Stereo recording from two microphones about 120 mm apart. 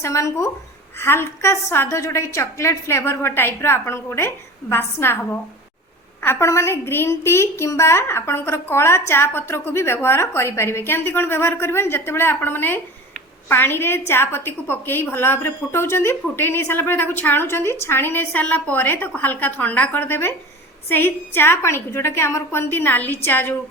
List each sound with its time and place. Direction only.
0.0 s a woman's voice: 25° left (ahead or behind)